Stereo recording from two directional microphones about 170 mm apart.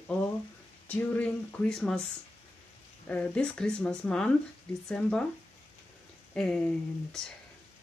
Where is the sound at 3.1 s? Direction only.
10° left (ahead or behind).